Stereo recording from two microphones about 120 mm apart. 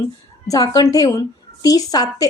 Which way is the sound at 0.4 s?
30° left (ahead or behind).